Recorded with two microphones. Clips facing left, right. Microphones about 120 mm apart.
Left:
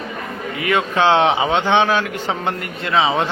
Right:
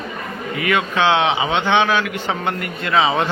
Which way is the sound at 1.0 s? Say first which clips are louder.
Left 3 dB; 40° left (ahead or behind).